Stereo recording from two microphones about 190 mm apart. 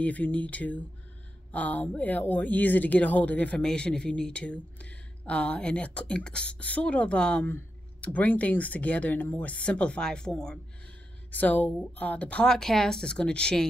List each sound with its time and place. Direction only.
0.0 s speech: 10° left (ahead or behind)